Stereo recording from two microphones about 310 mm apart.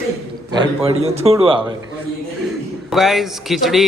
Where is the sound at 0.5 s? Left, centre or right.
Centre.